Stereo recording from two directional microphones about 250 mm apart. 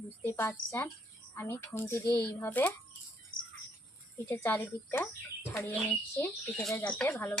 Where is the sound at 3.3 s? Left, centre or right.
Left.